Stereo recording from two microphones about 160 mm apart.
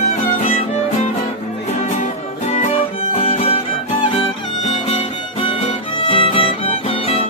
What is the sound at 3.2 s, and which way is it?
Music, 35° left (ahead or behind).